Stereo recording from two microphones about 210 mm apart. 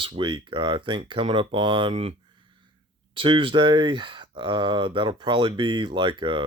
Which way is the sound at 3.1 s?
25° right (ahead or behind).